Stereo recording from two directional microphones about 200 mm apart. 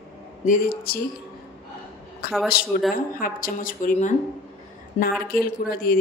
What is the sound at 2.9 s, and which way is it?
A woman's voice, 45° left (ahead or behind).